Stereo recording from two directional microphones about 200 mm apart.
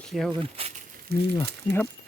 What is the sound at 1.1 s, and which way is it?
Speech, 55° right (ahead or behind).